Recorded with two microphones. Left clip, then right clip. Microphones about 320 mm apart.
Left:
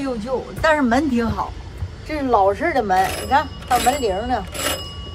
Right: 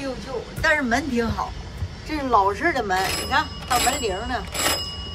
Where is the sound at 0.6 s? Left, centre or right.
Centre.